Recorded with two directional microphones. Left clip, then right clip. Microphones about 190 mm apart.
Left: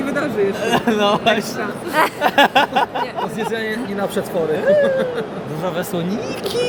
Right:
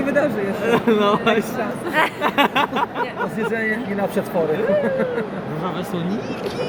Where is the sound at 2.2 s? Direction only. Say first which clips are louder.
Left 4 dB; 65° left (ahead or behind).